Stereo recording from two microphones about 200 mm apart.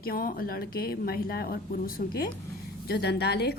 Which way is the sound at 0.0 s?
45° left (ahead or behind).